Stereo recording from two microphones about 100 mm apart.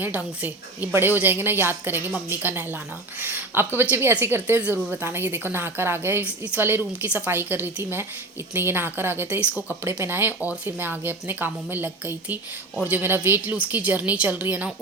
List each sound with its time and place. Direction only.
0.0 s a woman's voice: 15° right (ahead or behind)